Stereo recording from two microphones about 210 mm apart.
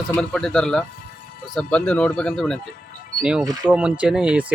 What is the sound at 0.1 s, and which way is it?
Speech, 5° left (ahead or behind).